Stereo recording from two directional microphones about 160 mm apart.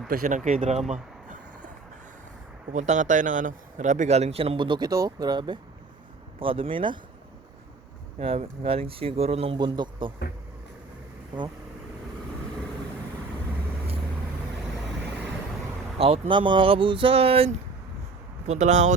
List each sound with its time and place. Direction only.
0.1 s speech: 60° right (ahead or behind)
2.7 s speech: 50° right (ahead or behind); by 7.0 s 30° right (ahead or behind)
8.2 s speech: 35° right (ahead or behind)
16.0 s speech: 40° right (ahead or behind)
18.4 s speech: 50° right (ahead or behind)